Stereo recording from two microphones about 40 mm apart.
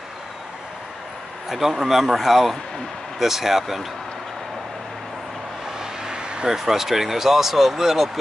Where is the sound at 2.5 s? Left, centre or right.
Centre.